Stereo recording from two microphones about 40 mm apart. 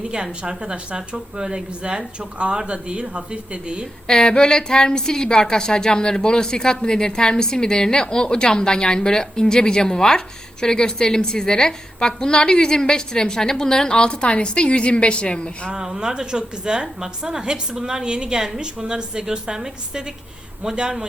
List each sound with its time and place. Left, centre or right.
0.0 s a woman's voice: right
4.0 s a woman's voice: centre
15.7 s a woman's voice: centre